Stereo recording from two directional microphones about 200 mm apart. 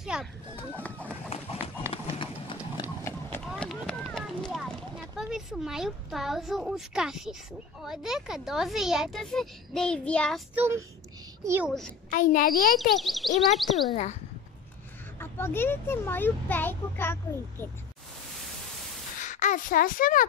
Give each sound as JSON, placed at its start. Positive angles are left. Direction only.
{"t": 0.0, "sound": "a sound", "side_deg": 0}
{"t": 0.6, "sound": "run", "side_deg": 10}
{"t": 1.9, "sound": "a sound", "side_deg": 25}
{"t": 3.0, "sound": "run", "side_deg": 10}
{"t": 3.4, "sound": "a sound", "side_deg": 0}
{"t": 7.8, "sound": "speech", "side_deg": 0}
{"t": 10.5, "sound": "speech", "side_deg": -10}
{"t": 12.1, "sound": "a woman's voice", "side_deg": 45}
{"t": 12.9, "sound": "speech", "side_deg": 0}
{"t": 15.1, "sound": "a child's voice", "side_deg": 10}
{"t": 19.2, "sound": "speech", "side_deg": 40}